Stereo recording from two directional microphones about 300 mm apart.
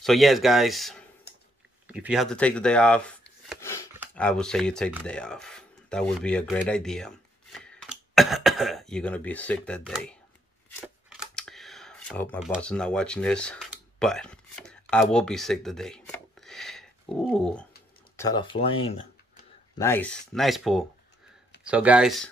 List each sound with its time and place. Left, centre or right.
0.0 s speech: centre
10.7 s a sound: centre
18.1 s speech: centre
19.8 s speech: centre